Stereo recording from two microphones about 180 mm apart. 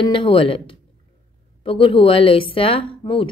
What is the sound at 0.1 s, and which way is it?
Speech, 30° left (ahead or behind).